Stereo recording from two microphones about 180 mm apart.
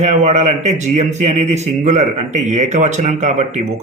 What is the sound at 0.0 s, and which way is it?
A man's voice, 40° right (ahead or behind).